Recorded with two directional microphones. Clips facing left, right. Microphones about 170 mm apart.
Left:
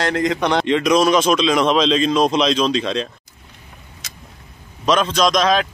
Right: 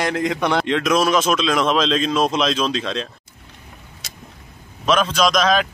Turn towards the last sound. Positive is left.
turn(degrees=0)  # may be behind; listen again after turning